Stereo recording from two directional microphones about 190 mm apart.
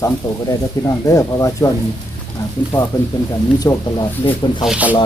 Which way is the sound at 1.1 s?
15° left (ahead or behind).